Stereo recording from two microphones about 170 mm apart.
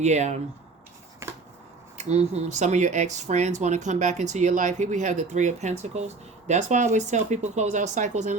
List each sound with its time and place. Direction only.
0.0 s speech: 40° right (ahead or behind)
1.2 s a sound: 15° right (ahead or behind)
2.0 s speech: 40° right (ahead or behind)